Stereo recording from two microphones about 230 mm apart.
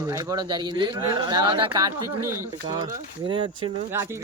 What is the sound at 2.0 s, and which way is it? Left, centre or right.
Speech, right.